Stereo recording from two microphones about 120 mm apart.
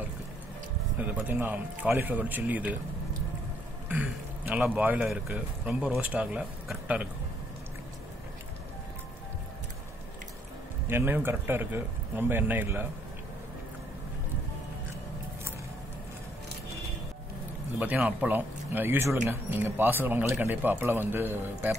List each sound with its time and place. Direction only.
0.9 s speech: 10° right (ahead or behind)
3.9 s speech: 10° right (ahead or behind)
10.9 s speech: 20° right (ahead or behind)
17.7 s speech: 15° right (ahead or behind)